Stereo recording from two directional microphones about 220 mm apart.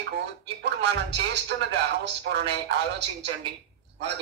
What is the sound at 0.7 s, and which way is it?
Speech, 50° right (ahead or behind).